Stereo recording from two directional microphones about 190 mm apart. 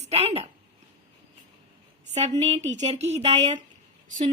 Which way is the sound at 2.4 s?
35° right (ahead or behind).